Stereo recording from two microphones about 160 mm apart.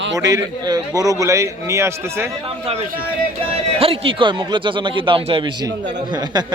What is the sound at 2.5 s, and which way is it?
A man's voice, 40° right (ahead or behind).